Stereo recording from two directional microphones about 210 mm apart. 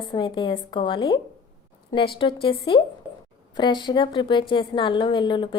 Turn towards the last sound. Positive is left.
turn(degrees=20)  # may be behind; listen again after turning